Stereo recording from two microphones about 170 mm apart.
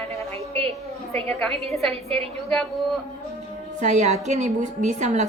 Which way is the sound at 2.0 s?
35° right (ahead or behind).